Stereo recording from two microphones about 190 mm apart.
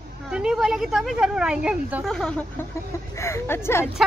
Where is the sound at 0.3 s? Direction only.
5° right (ahead or behind).